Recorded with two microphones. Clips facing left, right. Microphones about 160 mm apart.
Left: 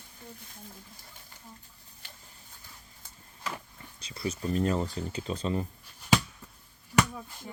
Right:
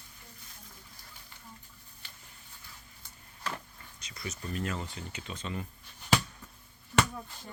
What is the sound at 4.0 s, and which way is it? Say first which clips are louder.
Speech: left 8 dB; 30° left (ahead or behind).